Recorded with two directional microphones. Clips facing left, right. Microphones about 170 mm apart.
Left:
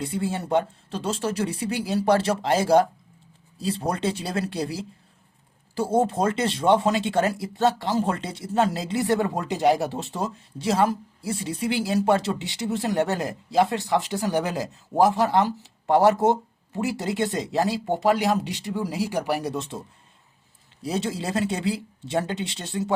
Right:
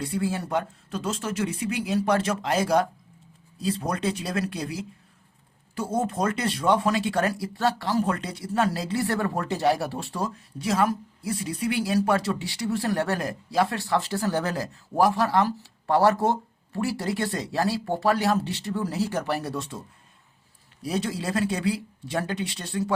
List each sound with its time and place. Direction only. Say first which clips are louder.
0.0 s speech: even; 25° left (ahead or behind)
20.8 s speech: left 1 dB; 25° left (ahead or behind)